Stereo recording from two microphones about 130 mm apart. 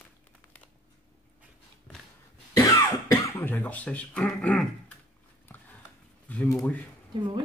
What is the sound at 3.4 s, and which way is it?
Speech, 15° left (ahead or behind).